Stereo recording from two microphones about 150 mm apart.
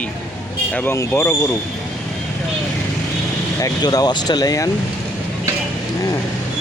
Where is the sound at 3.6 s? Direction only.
25° left (ahead or behind).